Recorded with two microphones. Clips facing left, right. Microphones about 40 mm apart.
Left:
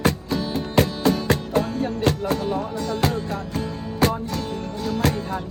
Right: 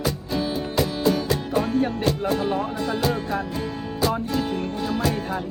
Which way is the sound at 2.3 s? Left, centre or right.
Right.